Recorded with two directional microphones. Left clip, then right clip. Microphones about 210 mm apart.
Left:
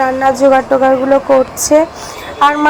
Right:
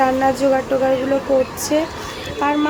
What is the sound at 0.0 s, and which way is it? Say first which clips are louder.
Speech: left 6 dB; 15° left (ahead or behind).